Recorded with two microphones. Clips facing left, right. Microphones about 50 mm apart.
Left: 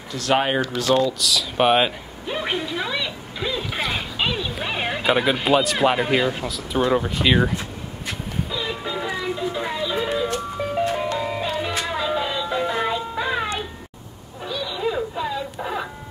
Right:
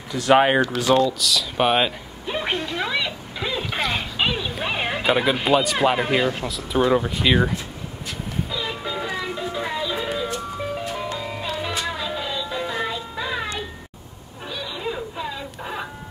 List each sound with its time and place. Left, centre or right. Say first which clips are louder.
0.1 s speech: right 4 dB; centre
1.0 s speech: even; centre
8.5 s music: left 1 dB; centre
11.2 s music: left 3 dB; centre
14.8 s a sound: left 5 dB; centre